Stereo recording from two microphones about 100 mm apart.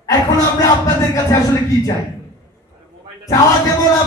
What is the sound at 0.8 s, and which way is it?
Music, 35° left (ahead or behind).